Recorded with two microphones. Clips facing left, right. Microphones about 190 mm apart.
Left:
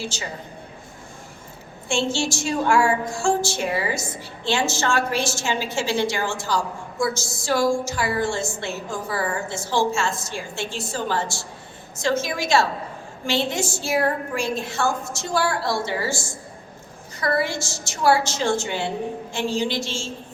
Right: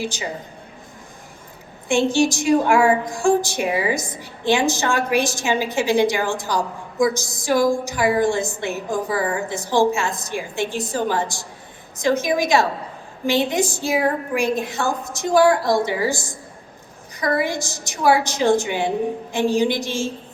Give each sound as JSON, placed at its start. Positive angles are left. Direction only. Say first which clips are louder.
{"t": 0.0, "sound": "a woman's voice", "louder": "right 4 dB", "side_deg": -15}
{"t": 1.9, "sound": "a woman's voice", "louder": "right 6 dB", "side_deg": -15}